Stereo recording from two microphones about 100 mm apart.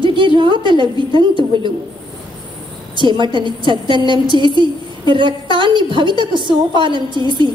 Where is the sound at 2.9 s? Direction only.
55° right (ahead or behind).